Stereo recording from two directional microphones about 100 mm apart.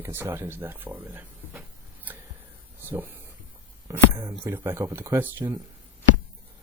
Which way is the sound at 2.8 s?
20° right (ahead or behind).